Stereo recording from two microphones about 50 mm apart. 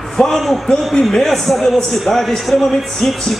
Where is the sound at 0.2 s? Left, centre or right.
Centre.